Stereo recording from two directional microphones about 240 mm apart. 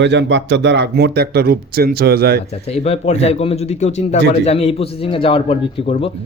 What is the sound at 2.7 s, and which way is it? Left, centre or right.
Speech, left.